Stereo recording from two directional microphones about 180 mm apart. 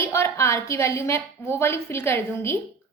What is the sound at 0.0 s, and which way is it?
A woman's voice, 15° left (ahead or behind).